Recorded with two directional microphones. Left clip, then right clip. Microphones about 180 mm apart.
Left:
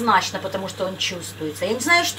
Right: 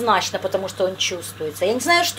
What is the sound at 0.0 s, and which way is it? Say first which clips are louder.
Speech: even; 50° right (ahead or behind).